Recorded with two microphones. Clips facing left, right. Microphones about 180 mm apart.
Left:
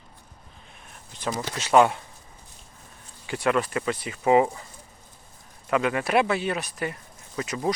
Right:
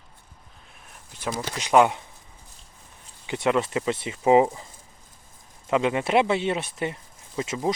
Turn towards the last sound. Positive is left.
turn(degrees=-25)  # may be behind; listen again after turning